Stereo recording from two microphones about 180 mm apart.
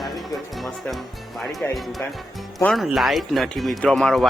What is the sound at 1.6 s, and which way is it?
Speech, 10° left (ahead or behind).